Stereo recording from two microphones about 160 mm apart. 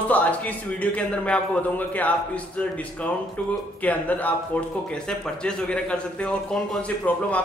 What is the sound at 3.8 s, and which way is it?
A man's voice, 10° left (ahead or behind).